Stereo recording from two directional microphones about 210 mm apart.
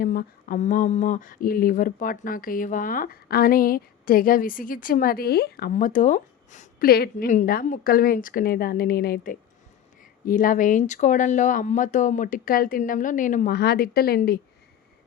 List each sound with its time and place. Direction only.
0.0 s speech: 45° left (ahead or behind)